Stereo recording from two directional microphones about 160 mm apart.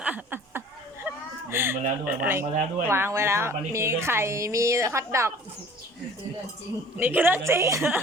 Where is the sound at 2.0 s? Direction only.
10° right (ahead or behind).